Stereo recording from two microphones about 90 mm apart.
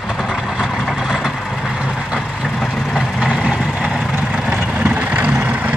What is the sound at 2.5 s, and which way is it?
Vehicle, centre (ahead or behind).